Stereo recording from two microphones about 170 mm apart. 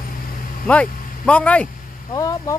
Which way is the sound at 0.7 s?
10° left (ahead or behind).